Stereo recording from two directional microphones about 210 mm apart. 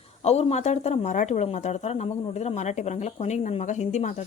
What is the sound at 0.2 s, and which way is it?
Speech, 30° left (ahead or behind).